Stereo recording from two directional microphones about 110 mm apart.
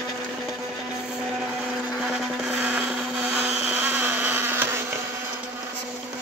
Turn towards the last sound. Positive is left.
turn(degrees=-20)  # may be behind; listen again after turning